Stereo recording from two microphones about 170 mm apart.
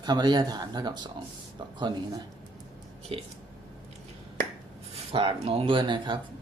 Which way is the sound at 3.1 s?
35° right (ahead or behind).